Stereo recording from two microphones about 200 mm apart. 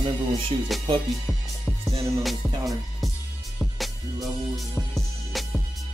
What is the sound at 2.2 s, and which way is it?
Music, centre (ahead or behind).